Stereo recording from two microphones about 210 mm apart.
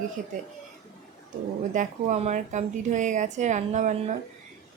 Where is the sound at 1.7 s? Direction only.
35° right (ahead or behind).